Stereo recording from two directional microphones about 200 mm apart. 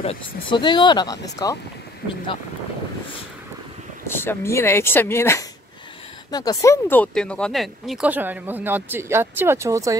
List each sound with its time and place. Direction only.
0.0 s speech: 25° left (ahead or behind)
4.1 s speech: 10° left (ahead or behind); by 9.9 s 15° right (ahead or behind)